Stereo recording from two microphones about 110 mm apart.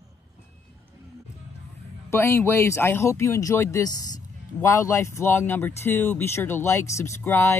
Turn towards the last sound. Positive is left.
turn(degrees=20)  # may be behind; listen again after turning